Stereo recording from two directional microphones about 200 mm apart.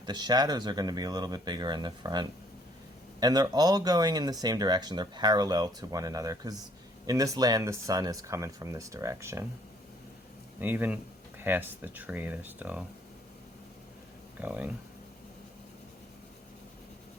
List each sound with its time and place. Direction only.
0.0 s speech: 20° right (ahead or behind)
10.6 s speech: 10° right (ahead or behind)
14.3 s speech: 10° right (ahead or behind)